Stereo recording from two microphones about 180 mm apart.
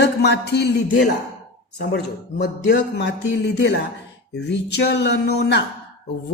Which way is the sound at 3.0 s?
70° left (ahead or behind).